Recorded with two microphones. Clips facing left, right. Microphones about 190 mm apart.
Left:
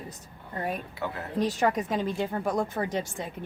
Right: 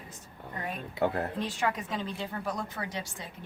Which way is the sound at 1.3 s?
40° left (ahead or behind).